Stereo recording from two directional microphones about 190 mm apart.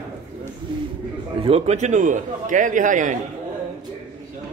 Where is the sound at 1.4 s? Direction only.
35° right (ahead or behind).